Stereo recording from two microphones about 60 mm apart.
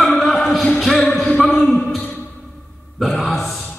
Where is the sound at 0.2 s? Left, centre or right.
Centre.